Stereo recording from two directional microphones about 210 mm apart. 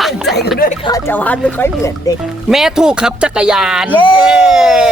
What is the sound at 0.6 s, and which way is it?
Speech, 45° left (ahead or behind).